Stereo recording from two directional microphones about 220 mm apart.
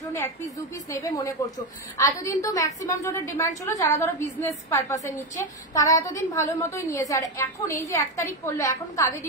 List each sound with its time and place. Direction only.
0.8 s a woman's voice: 15° left (ahead or behind)